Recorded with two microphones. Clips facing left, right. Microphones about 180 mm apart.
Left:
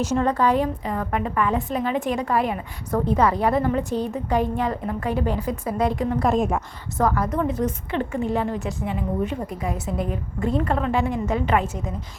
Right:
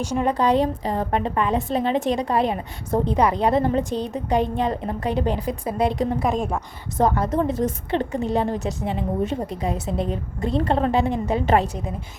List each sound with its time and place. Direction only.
0.1 s a woman's voice: 15° right (ahead or behind)
0.5 s a woman's voice: 30° right (ahead or behind)
6.0 s a woman's voice: 30° right (ahead or behind)
6.2 s a woman's voice: 5° left (ahead or behind)
7.0 s a woman's voice: 25° right (ahead or behind)